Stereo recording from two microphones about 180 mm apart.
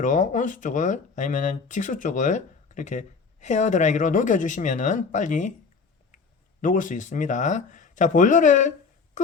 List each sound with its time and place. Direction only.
0.0 s speech: 45° left (ahead or behind)
6.6 s speech: 45° left (ahead or behind)
9.2 s a sound: 45° left (ahead or behind)